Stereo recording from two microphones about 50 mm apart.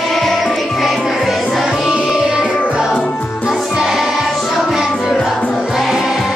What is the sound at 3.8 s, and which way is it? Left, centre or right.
Choir, centre.